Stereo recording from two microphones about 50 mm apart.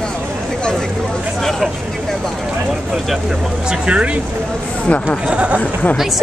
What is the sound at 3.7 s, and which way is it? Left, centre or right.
Speech, right.